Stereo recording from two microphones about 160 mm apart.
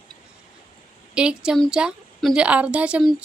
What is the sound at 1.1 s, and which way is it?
A woman's voice, 5° right (ahead or behind).